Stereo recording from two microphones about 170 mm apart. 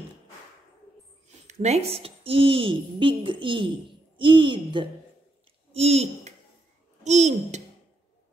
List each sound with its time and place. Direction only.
1.5 s a child's voice: 40° right (ahead or behind)